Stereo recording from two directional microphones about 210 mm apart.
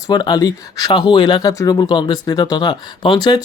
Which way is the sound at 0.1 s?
20° left (ahead or behind).